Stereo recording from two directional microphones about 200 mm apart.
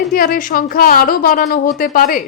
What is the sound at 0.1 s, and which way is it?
Speech, 45° left (ahead or behind).